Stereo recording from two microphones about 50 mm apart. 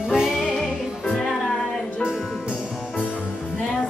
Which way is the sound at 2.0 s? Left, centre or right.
Centre.